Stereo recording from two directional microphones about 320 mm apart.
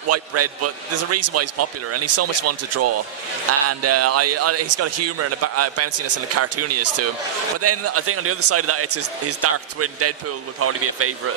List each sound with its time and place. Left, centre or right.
0.1 s a man's voice: right